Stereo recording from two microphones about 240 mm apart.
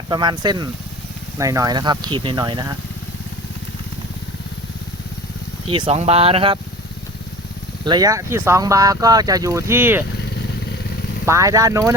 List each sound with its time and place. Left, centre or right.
0.1 s speech: centre
5.6 s speech: right
7.9 s speech: centre
11.3 s speech: centre